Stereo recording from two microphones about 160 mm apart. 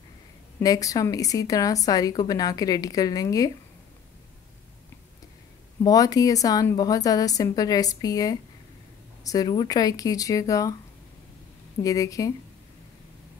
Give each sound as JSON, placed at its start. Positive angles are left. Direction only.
{"t": 0.6, "sound": "a woman's voice", "side_deg": 20}
{"t": 5.9, "sound": "a woman's voice", "side_deg": 20}
{"t": 11.8, "sound": "a woman's voice", "side_deg": 20}